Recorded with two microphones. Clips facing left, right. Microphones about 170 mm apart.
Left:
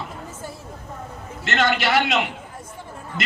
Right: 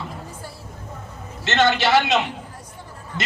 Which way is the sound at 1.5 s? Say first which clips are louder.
Right 3 dB; 30° right (ahead or behind).